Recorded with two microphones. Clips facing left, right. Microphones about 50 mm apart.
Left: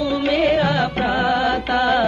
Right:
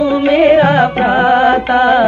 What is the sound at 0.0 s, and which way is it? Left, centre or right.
Music, right.